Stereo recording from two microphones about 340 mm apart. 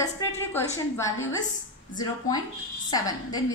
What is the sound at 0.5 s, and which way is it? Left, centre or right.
A woman's voice, centre.